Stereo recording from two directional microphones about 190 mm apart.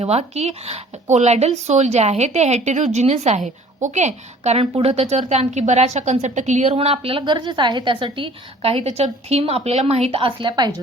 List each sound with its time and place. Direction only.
0.0 s a woman's voice: 35° right (ahead or behind)